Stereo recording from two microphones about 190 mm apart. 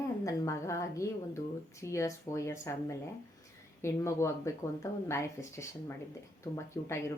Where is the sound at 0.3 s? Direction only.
15° left (ahead or behind).